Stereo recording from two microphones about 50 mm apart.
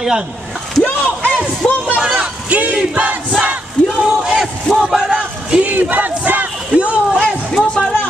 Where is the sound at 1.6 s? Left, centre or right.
Left.